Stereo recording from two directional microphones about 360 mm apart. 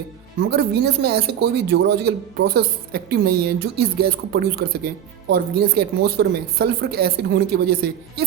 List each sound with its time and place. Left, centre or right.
0.5 s a man's voice: right